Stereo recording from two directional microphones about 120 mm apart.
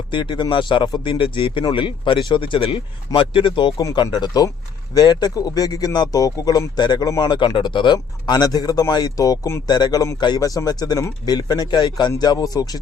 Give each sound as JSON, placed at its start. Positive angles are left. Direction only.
{"t": 0.1, "sound": "speech", "side_deg": 40}